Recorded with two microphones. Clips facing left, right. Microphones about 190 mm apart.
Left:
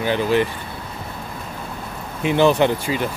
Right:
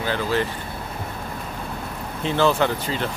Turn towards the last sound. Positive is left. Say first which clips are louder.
# left 4 dB
turn(degrees=10)  # may be behind; listen again after turning